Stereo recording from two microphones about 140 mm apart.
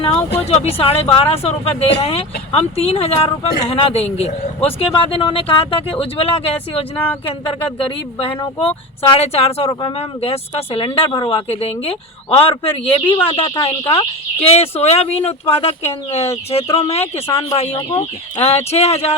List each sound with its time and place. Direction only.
0.3 s speech: 50° left (ahead or behind)